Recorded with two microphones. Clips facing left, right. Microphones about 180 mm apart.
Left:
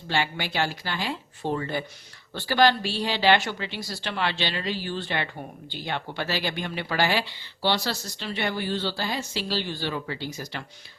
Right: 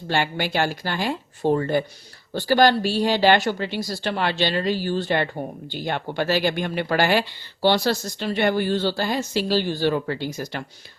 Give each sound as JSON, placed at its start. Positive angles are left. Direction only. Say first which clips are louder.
{"t": 0.1, "sound": "speech", "louder": "right 4 dB", "side_deg": -50}